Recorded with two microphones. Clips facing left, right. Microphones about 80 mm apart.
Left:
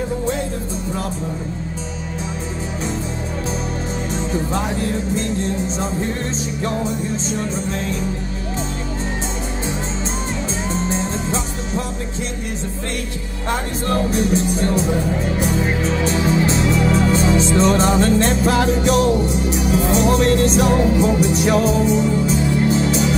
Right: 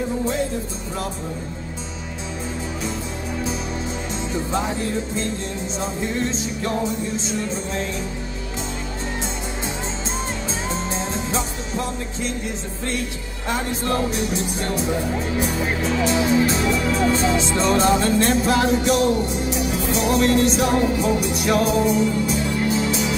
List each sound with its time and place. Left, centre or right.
10.7 s music: left
14.1 s music: left